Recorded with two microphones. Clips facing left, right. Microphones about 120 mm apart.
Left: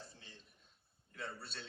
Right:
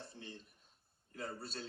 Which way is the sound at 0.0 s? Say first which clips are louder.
Right 6 dB; 55° right (ahead or behind).